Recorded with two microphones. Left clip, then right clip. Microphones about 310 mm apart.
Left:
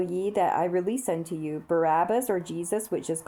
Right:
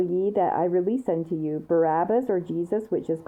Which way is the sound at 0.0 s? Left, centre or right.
Centre.